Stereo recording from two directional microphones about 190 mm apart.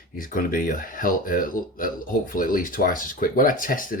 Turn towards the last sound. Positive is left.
turn(degrees=45)  # may be behind; listen again after turning